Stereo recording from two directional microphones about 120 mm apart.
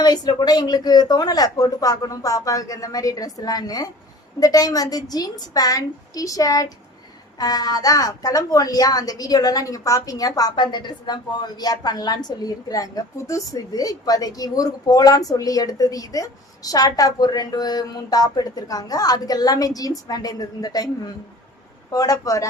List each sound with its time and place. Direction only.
0.0 s a woman's voice: 35° left (ahead or behind)
21.9 s speech: 30° left (ahead or behind)